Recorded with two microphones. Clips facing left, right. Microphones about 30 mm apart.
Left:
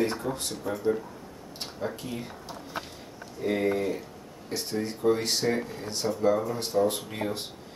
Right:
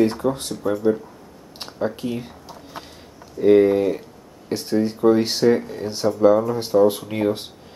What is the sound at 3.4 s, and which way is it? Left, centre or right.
Speech, right.